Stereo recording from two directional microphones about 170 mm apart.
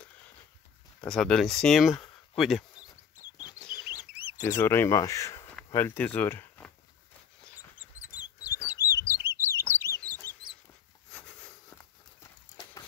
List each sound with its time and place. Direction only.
1.0 s speech: 5° left (ahead or behind)
2.0 s a sound: centre (ahead or behind)
2.7 s a sound: 25° left (ahead or behind)
4.1 s chicken: 10° right (ahead or behind)
4.4 s speech: 15° left (ahead or behind)
8.0 s bird: 15° left (ahead or behind)
8.7 s chirp: 20° left (ahead or behind)
9.1 s chirp: 15° right (ahead or behind)
11.8 s horse: 20° left (ahead or behind)